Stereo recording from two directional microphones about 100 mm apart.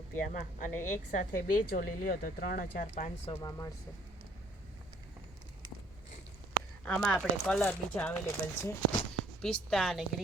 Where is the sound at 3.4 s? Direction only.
35° left (ahead or behind).